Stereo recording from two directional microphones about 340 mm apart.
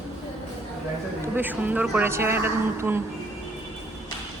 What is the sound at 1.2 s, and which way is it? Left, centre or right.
A woman's voice, centre.